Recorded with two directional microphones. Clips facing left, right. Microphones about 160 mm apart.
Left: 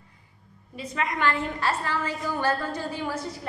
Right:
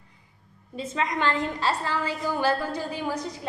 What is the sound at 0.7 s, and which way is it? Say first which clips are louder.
A woman's voice: right 2 dB; 25° right (ahead or behind).